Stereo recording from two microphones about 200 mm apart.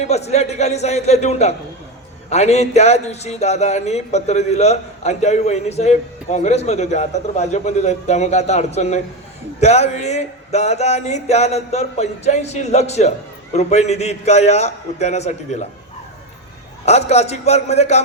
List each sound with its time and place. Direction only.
0.0 s speech: 35° left (ahead or behind)
16.8 s speech: 35° left (ahead or behind)